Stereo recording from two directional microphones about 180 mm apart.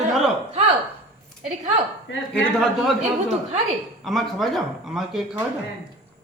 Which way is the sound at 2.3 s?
5° left (ahead or behind).